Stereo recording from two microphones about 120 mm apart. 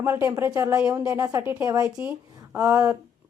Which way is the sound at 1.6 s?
30° right (ahead or behind).